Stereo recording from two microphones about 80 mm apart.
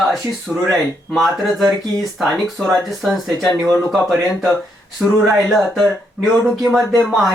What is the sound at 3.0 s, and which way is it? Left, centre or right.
Speech, centre.